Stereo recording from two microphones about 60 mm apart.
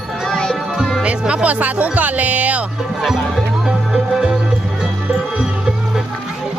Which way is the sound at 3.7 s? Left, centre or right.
Centre.